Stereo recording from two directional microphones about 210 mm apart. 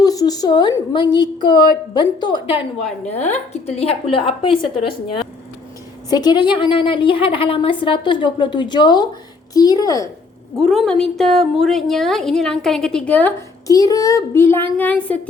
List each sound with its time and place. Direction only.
0.0 s a woman's voice: 15° left (ahead or behind)
3.0 s a woman's voice: 35° left (ahead or behind)
6.1 s a woman's voice: 20° left (ahead or behind)
10.6 s a woman's voice: centre (ahead or behind)